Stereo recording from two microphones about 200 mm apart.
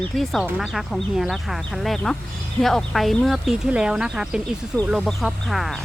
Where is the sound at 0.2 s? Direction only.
Centre (ahead or behind).